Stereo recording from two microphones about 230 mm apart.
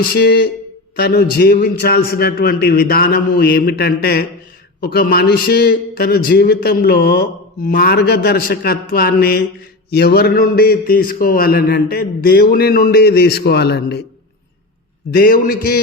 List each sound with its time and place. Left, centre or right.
0.0 s a man's voice: left
15.1 s a man's voice: left